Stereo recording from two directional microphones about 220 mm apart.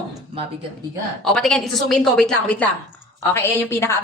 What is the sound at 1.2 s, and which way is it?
A woman's voice, 5° left (ahead or behind).